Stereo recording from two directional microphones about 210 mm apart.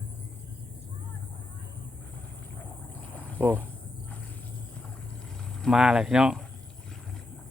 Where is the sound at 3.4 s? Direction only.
10° right (ahead or behind).